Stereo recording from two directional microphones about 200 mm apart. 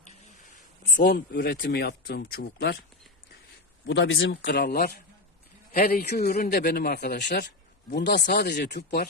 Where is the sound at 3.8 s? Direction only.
65° left (ahead or behind).